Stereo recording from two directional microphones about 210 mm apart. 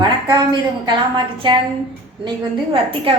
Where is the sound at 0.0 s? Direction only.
20° right (ahead or behind).